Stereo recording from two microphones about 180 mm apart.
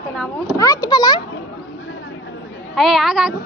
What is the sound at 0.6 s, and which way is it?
Speech, 20° left (ahead or behind).